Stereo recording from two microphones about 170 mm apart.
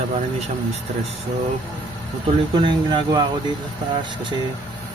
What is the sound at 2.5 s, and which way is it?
Speech, 25° right (ahead or behind).